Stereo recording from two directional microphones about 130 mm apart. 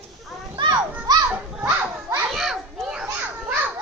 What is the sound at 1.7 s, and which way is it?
Children playing, 15° right (ahead or behind).